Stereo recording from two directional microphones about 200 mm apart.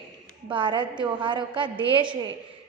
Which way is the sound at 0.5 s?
25° right (ahead or behind).